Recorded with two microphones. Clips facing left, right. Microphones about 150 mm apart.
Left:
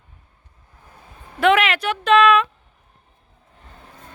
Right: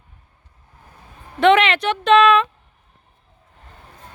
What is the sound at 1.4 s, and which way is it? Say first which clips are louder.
Speech: right 3 dB; 5° left (ahead or behind).